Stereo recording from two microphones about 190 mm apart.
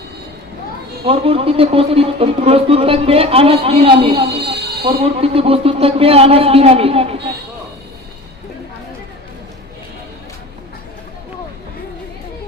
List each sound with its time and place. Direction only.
1.0 s a man's voice: 30° right (ahead or behind)